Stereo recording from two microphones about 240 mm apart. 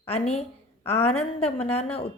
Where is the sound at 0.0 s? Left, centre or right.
Left.